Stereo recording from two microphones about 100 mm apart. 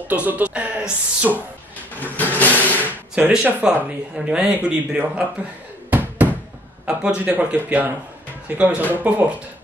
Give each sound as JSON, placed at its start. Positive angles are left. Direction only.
{"t": 0.1, "sound": "speech", "side_deg": -15}
{"t": 2.0, "sound": "vehicle", "side_deg": 20}
{"t": 2.8, "sound": "speech", "side_deg": -15}
{"t": 5.9, "sound": "a sound", "side_deg": -15}
{"t": 6.9, "sound": "speech", "side_deg": -10}